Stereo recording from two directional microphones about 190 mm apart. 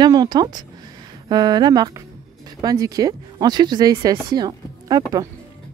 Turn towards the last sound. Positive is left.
turn(degrees=-20)  # may be behind; listen again after turning